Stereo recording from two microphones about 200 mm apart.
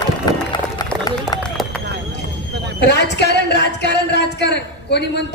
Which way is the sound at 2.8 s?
55° left (ahead or behind).